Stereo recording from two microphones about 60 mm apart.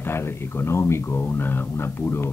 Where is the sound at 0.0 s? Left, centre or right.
Left.